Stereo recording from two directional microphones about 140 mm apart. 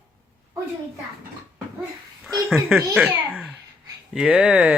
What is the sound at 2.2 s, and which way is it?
A child's voice, centre (ahead or behind).